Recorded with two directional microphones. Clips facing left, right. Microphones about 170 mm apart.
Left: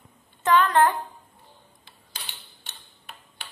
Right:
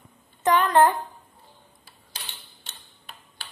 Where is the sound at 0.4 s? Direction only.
15° right (ahead or behind).